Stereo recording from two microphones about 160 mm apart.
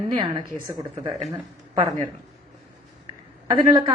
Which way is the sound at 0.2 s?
25° right (ahead or behind).